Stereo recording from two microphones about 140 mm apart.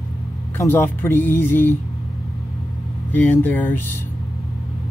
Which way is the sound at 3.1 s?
15° left (ahead or behind).